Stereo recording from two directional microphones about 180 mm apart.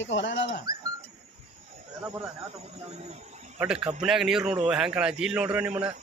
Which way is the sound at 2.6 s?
35° right (ahead or behind).